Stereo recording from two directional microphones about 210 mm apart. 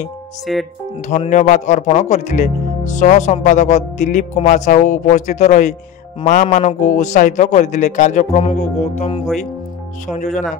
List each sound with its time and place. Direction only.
0.5 s speech: centre (ahead or behind)
1.0 s speech: 35° left (ahead or behind)